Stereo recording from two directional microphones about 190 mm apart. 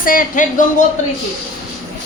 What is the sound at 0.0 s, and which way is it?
Speech, 50° left (ahead or behind).